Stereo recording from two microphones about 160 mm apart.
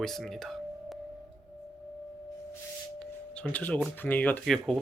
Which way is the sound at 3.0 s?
5° left (ahead or behind).